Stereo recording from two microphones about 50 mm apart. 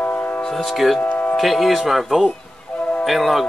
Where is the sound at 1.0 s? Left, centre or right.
Left.